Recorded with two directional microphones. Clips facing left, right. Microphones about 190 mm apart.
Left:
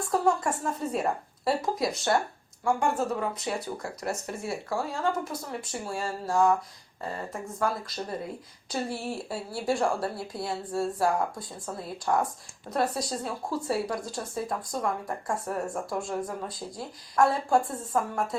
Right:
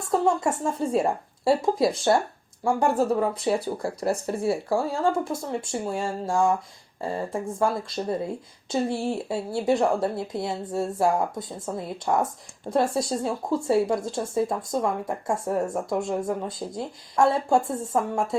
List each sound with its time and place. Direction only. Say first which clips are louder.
0.1 s speech: right 4 dB; 25° right (ahead or behind)
7.6 s speech: right 4 dB; 25° right (ahead or behind)